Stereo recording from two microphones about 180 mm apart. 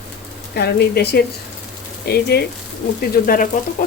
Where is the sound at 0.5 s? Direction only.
65° left (ahead or behind).